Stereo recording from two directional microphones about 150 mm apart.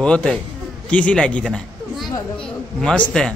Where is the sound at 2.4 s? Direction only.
5° left (ahead or behind).